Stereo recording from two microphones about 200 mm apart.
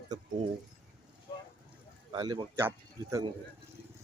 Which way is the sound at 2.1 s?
20° right (ahead or behind).